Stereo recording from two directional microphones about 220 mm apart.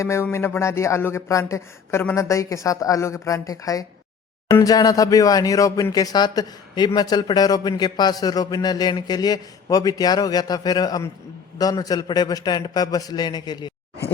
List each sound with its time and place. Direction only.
0.0 s speech: 10° left (ahead or behind)